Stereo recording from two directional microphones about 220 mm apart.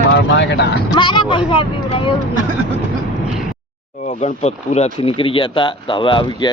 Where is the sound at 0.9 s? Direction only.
20° left (ahead or behind).